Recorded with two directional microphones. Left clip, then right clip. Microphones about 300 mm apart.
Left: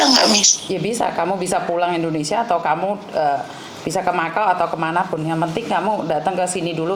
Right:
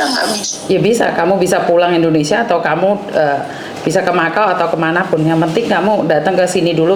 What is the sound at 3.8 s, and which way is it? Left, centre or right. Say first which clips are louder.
A woman's voice: right 7 dB; centre.